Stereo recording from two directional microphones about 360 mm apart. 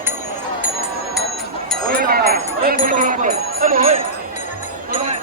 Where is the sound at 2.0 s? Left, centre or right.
Right.